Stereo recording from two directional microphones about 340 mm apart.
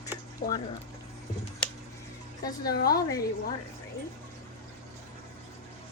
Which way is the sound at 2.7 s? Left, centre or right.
Left.